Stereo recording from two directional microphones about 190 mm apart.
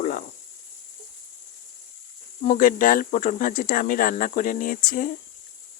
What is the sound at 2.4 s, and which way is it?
Speech, 45° left (ahead or behind).